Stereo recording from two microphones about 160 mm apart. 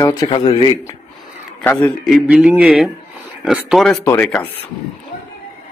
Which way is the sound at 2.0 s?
5° right (ahead or behind).